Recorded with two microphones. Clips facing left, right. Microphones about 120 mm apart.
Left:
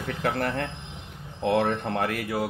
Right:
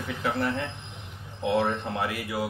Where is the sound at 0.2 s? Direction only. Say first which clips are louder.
Left 1 dB; 50° left (ahead or behind).